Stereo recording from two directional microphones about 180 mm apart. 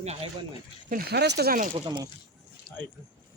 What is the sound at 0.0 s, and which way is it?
Speech, 35° right (ahead or behind).